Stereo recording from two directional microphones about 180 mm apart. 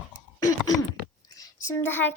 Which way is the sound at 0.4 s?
20° left (ahead or behind).